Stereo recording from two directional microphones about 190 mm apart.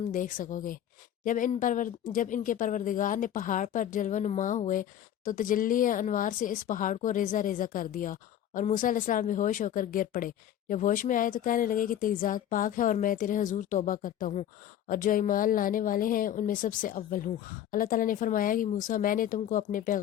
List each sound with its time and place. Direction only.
0.1 s speech: 45° left (ahead or behind)